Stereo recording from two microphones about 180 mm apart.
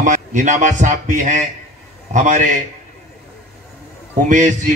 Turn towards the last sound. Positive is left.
turn(degrees=-45)  # may be behind; listen again after turning